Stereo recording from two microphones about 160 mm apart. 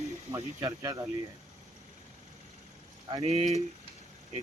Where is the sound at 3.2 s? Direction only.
45° right (ahead or behind).